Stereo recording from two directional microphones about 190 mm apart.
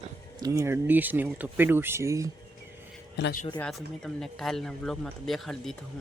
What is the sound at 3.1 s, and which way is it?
Speech, 65° left (ahead or behind).